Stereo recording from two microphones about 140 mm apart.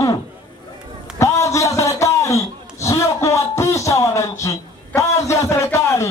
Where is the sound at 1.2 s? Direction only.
20° left (ahead or behind).